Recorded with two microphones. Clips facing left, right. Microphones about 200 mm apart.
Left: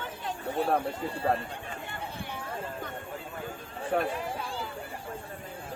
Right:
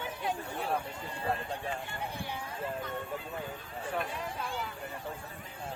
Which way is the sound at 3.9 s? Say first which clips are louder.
Left 8 dB; 65° left (ahead or behind).